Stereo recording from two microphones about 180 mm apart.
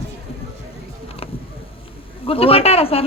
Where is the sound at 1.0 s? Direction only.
30° left (ahead or behind).